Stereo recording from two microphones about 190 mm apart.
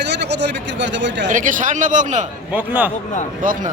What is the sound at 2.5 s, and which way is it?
Speech, 10° right (ahead or behind).